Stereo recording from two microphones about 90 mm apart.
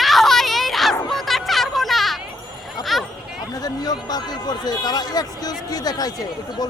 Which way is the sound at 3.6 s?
45° left (ahead or behind).